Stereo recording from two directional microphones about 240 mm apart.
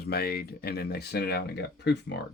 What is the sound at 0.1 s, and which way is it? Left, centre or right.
Speech, left.